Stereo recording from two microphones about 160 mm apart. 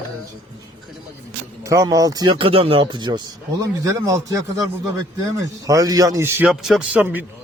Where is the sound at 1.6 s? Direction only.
20° right (ahead or behind).